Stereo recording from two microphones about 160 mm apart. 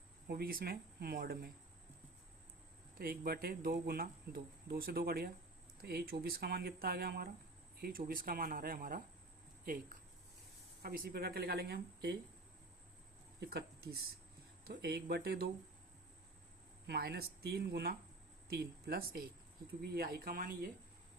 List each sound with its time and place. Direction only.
0.3 s speech: 75° right (ahead or behind)
3.0 s speech: 70° right (ahead or behind)
10.8 s speech: 70° right (ahead or behind); by 12.1 s 85° right
13.4 s speech: 90° right
16.8 s speech: 85° right; by 20.7 s 65° right (ahead or behind)